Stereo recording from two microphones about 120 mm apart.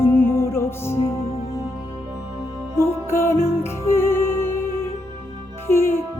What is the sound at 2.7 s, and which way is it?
Music, 20° left (ahead or behind).